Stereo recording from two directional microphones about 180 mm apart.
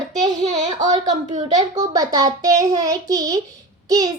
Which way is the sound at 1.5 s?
25° right (ahead or behind).